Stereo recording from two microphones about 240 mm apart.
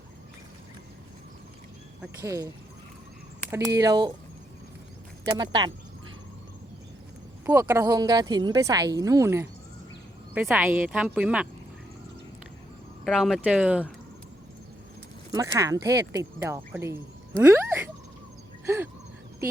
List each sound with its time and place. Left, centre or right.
2.0 s a woman's voice: centre
3.5 s a woman's voice: centre
5.2 s a woman's voice: centre
7.4 s a woman's voice: centre
13.1 s speech: centre
15.5 s a woman's voice: centre
18.6 s a sound: centre